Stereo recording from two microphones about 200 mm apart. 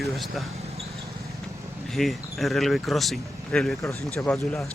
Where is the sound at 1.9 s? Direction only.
Centre (ahead or behind).